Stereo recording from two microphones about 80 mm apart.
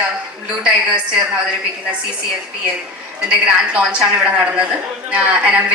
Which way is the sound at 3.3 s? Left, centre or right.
Centre.